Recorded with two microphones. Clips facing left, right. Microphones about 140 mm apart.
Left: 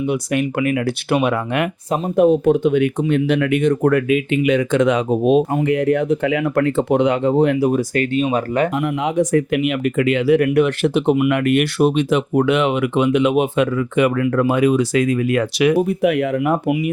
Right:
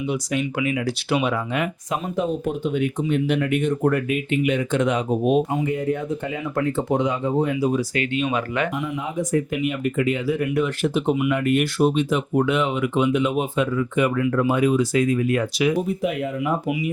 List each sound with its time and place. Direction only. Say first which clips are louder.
0.1 s speech: left 5 dB; 60° left (ahead or behind); by 8.7 s 40° left (ahead or behind)
8.8 s speech: left 8 dB; 75° left (ahead or behind)